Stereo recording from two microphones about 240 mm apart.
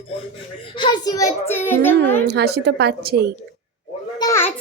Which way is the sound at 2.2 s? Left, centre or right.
Right.